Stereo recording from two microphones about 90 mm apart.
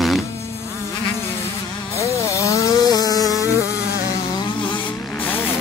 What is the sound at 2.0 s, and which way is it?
Chainsaw, 35° left (ahead or behind).